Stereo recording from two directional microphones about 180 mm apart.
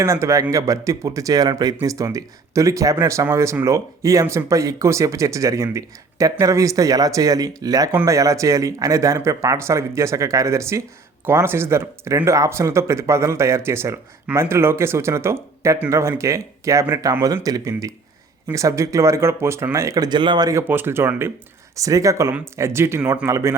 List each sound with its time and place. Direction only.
0.0 s speech: 15° right (ahead or behind)